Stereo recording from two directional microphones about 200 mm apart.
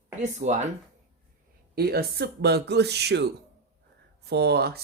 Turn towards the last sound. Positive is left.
turn(degrees=-55)  # may be behind; listen again after turning